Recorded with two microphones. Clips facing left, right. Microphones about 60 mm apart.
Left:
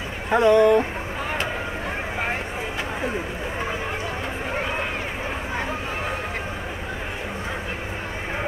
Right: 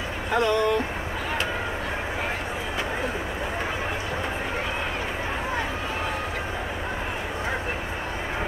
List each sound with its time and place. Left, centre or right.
0.3 s speech: left